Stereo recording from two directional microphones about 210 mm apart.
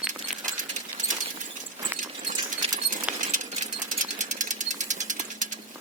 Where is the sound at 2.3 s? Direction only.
35° right (ahead or behind).